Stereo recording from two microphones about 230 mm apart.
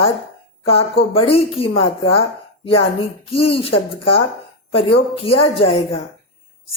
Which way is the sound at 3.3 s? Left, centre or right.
Left.